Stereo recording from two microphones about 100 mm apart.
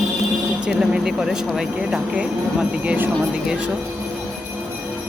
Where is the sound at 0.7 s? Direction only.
10° right (ahead or behind).